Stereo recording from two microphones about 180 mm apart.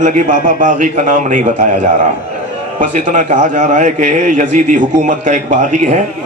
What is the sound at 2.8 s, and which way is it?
A man's voice, 45° right (ahead or behind).